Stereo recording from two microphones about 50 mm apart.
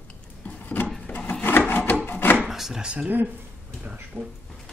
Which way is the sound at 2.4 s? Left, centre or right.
Centre.